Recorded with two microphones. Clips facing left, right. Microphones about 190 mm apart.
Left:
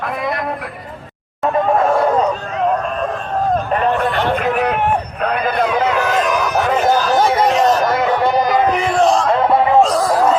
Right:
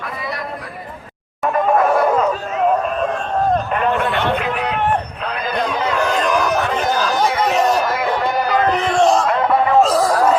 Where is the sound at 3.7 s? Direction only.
40° left (ahead or behind); by 5.5 s 55° left (ahead or behind).